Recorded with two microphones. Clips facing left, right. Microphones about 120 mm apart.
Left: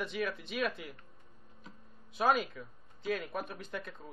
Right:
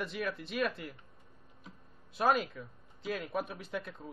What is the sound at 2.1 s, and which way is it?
Speech, centre (ahead or behind).